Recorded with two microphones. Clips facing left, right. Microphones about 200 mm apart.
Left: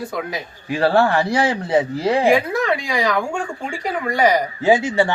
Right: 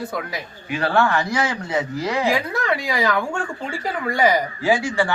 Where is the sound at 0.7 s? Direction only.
35° left (ahead or behind).